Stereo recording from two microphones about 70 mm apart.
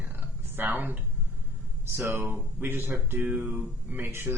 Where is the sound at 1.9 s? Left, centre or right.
Right.